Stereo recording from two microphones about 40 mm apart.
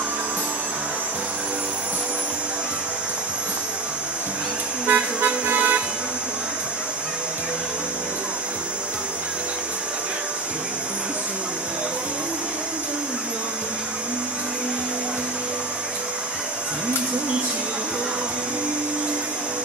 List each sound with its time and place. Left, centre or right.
4.8 s music: right